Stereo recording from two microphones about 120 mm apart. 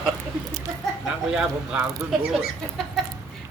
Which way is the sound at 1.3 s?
10° right (ahead or behind).